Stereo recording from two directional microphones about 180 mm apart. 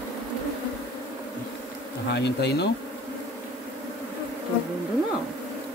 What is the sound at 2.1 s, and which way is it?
Speech, 70° left (ahead or behind).